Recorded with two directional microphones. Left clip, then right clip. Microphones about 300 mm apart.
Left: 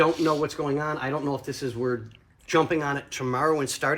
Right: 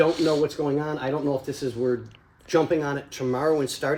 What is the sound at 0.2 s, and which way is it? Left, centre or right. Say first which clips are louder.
Speech: right 2 dB; right.